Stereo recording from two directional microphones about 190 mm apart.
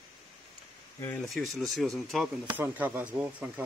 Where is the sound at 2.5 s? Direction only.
10° right (ahead or behind).